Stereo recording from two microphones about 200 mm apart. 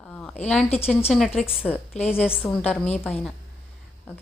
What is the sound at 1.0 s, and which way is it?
A woman's voice, centre (ahead or behind).